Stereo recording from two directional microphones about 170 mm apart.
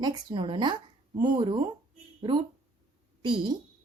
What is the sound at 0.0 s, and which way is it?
Speech, 25° right (ahead or behind).